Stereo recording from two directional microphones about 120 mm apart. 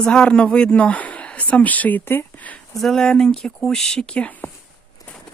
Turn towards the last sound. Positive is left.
turn(degrees=10)  # may be behind; listen again after turning